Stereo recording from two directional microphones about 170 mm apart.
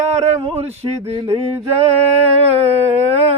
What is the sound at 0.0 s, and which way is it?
Speech, 40° right (ahead or behind).